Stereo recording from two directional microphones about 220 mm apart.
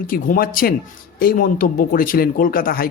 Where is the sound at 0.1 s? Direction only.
40° left (ahead or behind).